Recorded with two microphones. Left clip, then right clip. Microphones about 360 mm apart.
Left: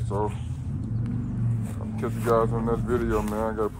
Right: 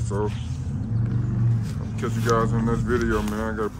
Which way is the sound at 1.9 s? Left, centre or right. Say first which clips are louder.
Even; centre.